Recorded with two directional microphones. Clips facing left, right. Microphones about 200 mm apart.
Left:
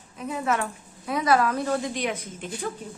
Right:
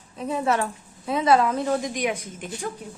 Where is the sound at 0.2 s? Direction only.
30° right (ahead or behind).